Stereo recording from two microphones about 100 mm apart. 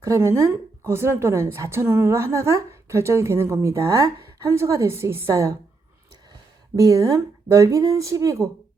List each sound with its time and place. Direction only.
0.0 s a woman's voice: 30° right (ahead or behind)
6.7 s speech: 35° right (ahead or behind)